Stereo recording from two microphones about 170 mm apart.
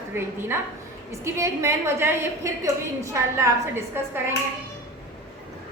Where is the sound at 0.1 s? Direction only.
15° right (ahead or behind).